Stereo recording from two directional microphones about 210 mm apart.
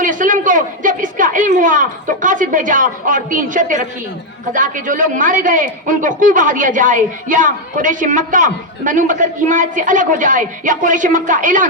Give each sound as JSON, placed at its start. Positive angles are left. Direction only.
{"t": 0.0, "sound": "a woman's voice", "side_deg": -40}